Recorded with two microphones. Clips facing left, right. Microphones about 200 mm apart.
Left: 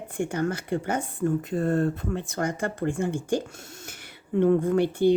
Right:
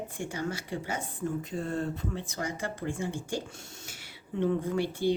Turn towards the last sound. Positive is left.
turn(degrees=55)  # may be behind; listen again after turning